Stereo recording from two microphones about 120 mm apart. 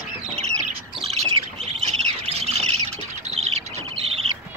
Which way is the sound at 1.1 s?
60° right (ahead or behind).